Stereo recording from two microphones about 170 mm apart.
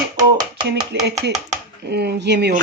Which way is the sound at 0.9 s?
85° right.